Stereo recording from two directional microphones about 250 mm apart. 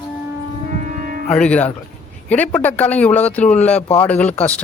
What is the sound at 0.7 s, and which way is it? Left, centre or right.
Music, right.